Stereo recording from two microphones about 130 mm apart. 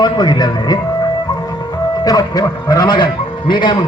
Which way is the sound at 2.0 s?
30° left (ahead or behind).